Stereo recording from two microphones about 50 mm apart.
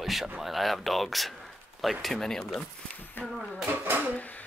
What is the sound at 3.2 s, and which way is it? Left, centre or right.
Speech, left.